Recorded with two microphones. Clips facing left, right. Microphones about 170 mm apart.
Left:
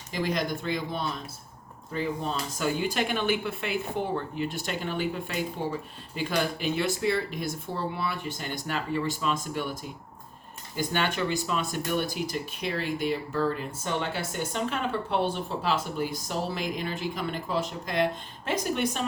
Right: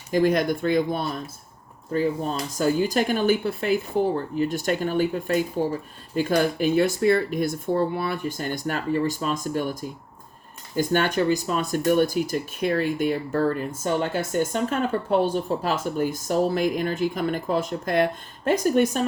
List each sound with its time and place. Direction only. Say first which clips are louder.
0.1 s speech: right 9 dB; 50° right (ahead or behind)
10.8 s speech: right 7 dB; 45° right (ahead or behind)